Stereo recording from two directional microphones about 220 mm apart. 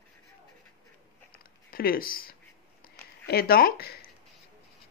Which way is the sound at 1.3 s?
45° left (ahead or behind).